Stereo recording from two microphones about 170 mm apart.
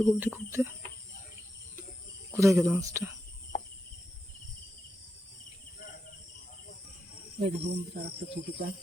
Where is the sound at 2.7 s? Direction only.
20° right (ahead or behind).